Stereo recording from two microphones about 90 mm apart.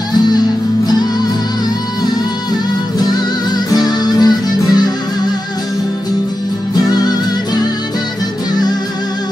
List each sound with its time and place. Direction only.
3.0 s music: 50° left (ahead or behind)
6.7 s music: 50° left (ahead or behind)